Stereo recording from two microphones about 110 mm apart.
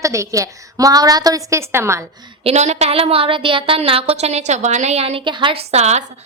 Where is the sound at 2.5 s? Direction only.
90° right; by 5.2 s 65° right (ahead or behind).